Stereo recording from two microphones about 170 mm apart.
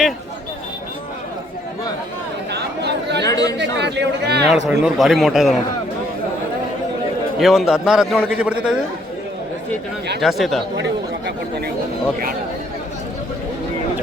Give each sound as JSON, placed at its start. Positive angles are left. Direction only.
{"t": 2.5, "sound": "chatter", "side_deg": -80}
{"t": 3.2, "sound": "chatter", "side_deg": 20}
{"t": 3.6, "sound": "chatter", "side_deg": -90}
{"t": 4.8, "sound": "a man's voice", "side_deg": 0}
{"t": 7.3, "sound": "a man's voice", "side_deg": 0}
{"t": 10.2, "sound": "a man's voice", "side_deg": 0}